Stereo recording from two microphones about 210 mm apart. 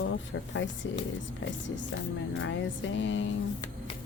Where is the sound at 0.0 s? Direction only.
65° left (ahead or behind).